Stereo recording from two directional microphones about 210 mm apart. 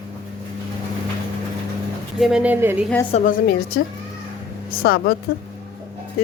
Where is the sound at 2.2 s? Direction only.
5° right (ahead or behind).